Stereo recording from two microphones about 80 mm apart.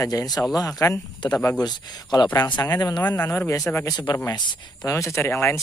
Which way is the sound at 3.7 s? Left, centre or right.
Left.